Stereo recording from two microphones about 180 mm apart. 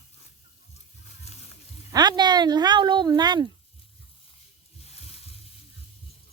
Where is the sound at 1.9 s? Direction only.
25° right (ahead or behind).